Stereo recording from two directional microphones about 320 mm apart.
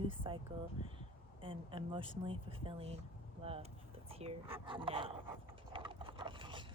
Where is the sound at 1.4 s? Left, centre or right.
Centre.